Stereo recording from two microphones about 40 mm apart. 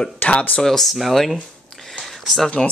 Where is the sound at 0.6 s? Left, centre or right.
Centre.